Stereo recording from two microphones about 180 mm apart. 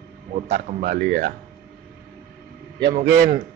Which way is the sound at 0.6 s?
50° right (ahead or behind).